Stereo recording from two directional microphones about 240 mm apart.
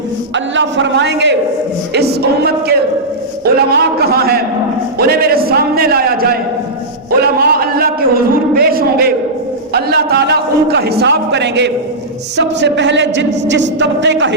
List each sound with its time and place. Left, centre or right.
0.3 s a man's voice: right
7.2 s a sound: right
12.4 s a man's voice: right